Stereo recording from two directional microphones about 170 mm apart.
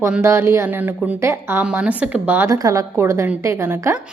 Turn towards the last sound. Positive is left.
turn(degrees=-15)  # may be behind; listen again after turning